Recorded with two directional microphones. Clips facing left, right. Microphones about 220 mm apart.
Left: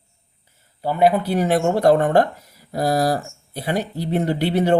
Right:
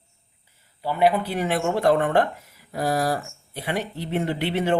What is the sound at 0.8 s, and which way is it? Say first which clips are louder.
Speech: left 3 dB; 45° left (ahead or behind).